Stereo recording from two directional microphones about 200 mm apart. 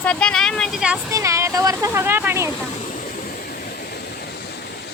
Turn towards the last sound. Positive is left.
turn(degrees=50)  # may be behind; listen again after turning